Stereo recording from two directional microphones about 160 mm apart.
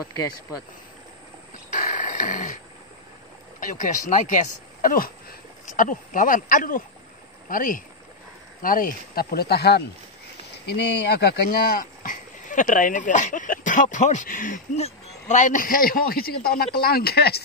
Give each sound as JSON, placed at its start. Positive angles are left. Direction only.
{"t": 0.0, "sound": "speech", "side_deg": 20}
{"t": 1.7, "sound": "a sound", "side_deg": 55}
{"t": 4.1, "sound": "speech", "side_deg": 50}
{"t": 14.8, "sound": "speech", "side_deg": 45}